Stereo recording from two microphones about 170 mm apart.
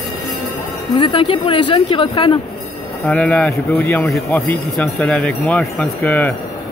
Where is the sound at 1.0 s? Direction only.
30° left (ahead or behind).